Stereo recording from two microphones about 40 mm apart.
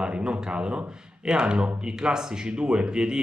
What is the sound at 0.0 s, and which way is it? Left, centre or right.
Speech, right.